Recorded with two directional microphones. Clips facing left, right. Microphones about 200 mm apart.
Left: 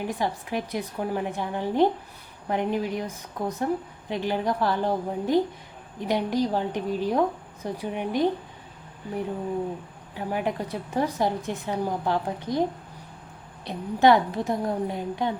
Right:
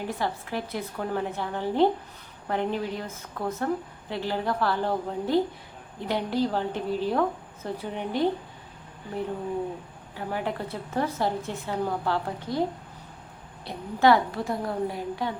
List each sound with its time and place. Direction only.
0.1 s a woman's voice: 15° left (ahead or behind)
10.2 s a woman's voice: 15° left (ahead or behind)
13.7 s a woman's voice: 20° left (ahead or behind)